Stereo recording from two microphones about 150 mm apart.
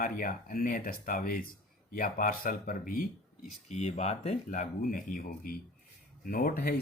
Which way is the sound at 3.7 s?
50° left (ahead or behind).